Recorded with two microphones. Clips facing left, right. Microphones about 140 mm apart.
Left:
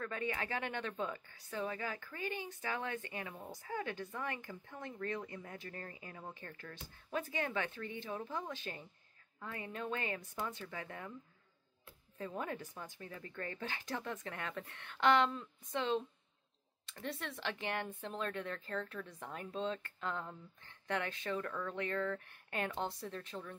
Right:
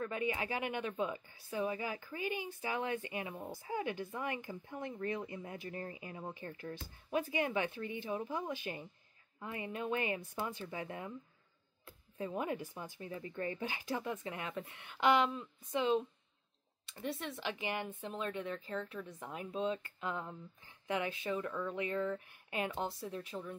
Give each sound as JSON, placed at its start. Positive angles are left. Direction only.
{"t": 0.0, "sound": "speech", "side_deg": -15}
{"t": 12.2, "sound": "speech", "side_deg": -15}